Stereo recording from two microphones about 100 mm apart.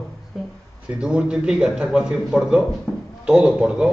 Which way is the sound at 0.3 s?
Centre (ahead or behind).